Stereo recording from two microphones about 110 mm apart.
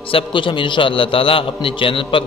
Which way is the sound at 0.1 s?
50° left (ahead or behind).